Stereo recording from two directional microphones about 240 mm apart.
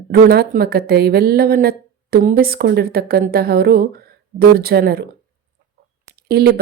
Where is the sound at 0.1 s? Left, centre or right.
Right.